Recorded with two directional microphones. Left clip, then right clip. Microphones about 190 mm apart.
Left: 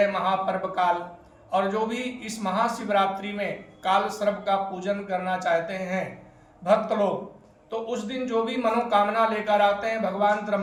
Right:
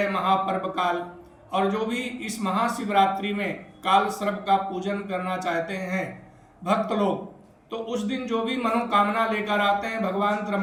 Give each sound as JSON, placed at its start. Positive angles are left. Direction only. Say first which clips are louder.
{"t": 0.1, "sound": "a man's voice", "louder": "right 2 dB", "side_deg": 15}
{"t": 7.7, "sound": "a man's voice", "louder": "even", "side_deg": 15}